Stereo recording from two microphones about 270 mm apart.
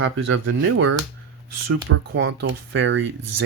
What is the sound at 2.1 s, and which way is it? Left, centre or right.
Speech, right.